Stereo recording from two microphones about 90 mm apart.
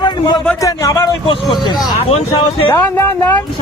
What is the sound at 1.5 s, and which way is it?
Speech, 55° left (ahead or behind).